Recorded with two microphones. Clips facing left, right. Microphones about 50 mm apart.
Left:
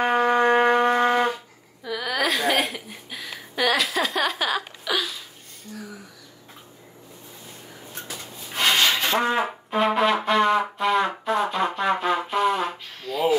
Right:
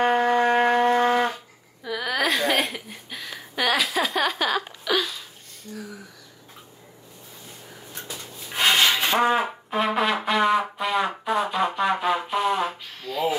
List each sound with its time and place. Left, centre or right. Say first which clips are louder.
0.0 s shofar: even; centre
0.4 s shofar: left 1 dB; centre
1.9 s a sound: even; centre
8.5 s rub: right 1 dB; centre
9.7 s music: left 3 dB; centre